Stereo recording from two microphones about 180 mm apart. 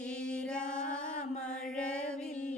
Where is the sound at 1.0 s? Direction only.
45° left (ahead or behind).